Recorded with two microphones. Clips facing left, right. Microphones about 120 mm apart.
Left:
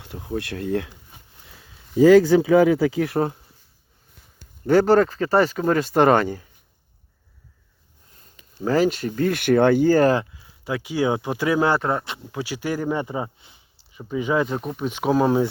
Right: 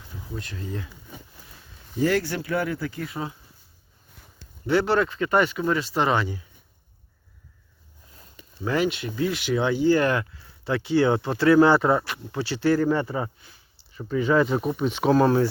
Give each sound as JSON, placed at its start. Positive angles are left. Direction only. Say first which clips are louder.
{"t": 0.0, "sound": "speech", "louder": "left 8 dB", "side_deg": 70}
{"t": 2.6, "sound": "speech", "louder": "left 11 dB", "side_deg": 90}
{"t": 4.6, "sound": "speech", "louder": "left 6 dB", "side_deg": 45}
{"t": 8.6, "sound": "speech", "louder": "left 5 dB", "side_deg": 40}
{"t": 10.3, "sound": "speech", "louder": "right 1 dB", "side_deg": 10}
{"t": 11.7, "sound": "speech", "louder": "right 2 dB", "side_deg": -5}
{"t": 12.3, "sound": "speech", "louder": "right 5 dB", "side_deg": 10}
{"t": 14.4, "sound": "speech", "louder": "right 3 dB", "side_deg": -5}
{"t": 14.8, "sound": "speech", "louder": "even", "side_deg": 10}